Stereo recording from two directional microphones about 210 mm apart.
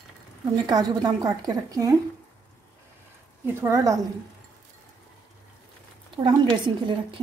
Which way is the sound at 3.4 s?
10° right (ahead or behind).